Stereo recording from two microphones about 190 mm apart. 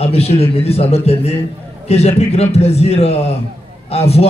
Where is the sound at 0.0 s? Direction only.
30° left (ahead or behind).